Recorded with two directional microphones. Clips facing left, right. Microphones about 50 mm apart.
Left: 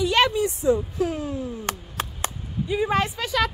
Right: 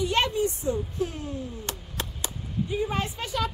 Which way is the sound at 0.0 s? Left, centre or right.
Left.